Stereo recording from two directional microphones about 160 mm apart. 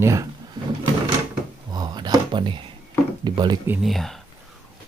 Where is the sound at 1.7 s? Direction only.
25° right (ahead or behind).